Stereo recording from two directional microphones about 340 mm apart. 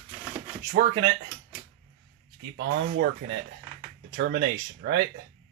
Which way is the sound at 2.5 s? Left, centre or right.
Right.